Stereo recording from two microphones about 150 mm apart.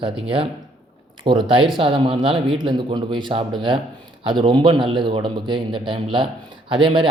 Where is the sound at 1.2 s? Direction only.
35° right (ahead or behind).